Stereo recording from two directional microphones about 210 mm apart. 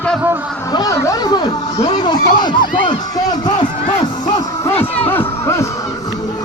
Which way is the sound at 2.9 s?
20° left (ahead or behind).